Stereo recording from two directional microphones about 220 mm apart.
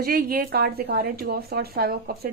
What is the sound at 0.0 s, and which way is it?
Speech, 40° right (ahead or behind).